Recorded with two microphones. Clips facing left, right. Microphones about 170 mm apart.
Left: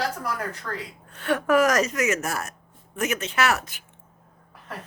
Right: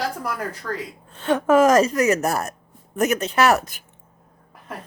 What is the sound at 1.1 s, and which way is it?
Speech, 25° right (ahead or behind).